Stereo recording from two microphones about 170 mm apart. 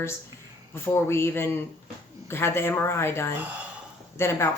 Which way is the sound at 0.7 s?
15° left (ahead or behind).